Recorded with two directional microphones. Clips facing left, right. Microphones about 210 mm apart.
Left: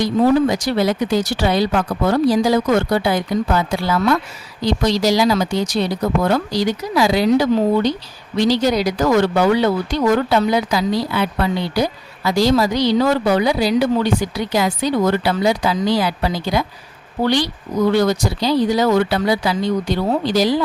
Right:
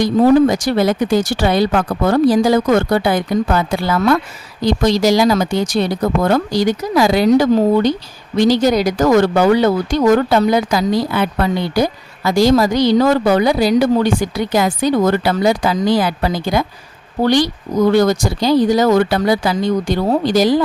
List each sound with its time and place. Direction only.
0.0 s speech: 45° right (ahead or behind)